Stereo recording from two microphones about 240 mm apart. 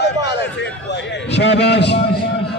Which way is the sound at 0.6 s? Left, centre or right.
Left.